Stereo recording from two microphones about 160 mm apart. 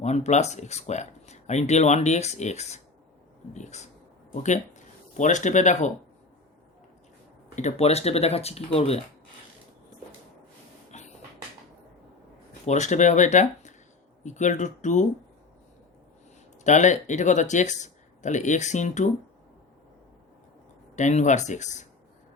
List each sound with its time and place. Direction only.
0.0 s speech: 45° left (ahead or behind)
7.5 s speech: 45° left (ahead or behind)
10.9 s a sound: 45° left (ahead or behind)
12.6 s speech: 45° left (ahead or behind)
16.6 s speech: 50° left (ahead or behind)
20.9 s speech: 45° left (ahead or behind)